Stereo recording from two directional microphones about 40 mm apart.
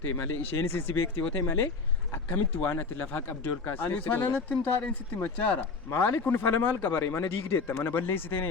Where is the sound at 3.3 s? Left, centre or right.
Left.